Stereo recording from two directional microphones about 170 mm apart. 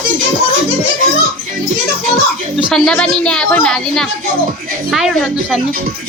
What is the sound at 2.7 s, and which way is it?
A woman's voice, 5° left (ahead or behind).